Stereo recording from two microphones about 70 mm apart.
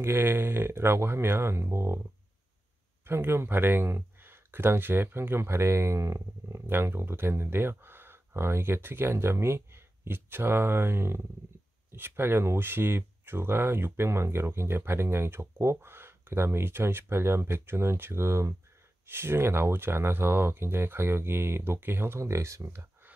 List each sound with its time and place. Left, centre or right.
0.0 s speech: right
3.1 s speech: right